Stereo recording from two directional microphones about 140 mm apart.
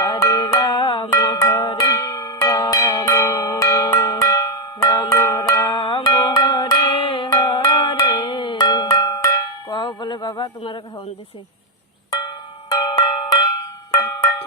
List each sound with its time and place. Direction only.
0.0 s music: 25° left (ahead or behind)
1.8 s bell: 25° left (ahead or behind)
7.3 s music: 30° left (ahead or behind)
9.7 s a sound: 35° left (ahead or behind)
12.8 s bell: 30° left (ahead or behind)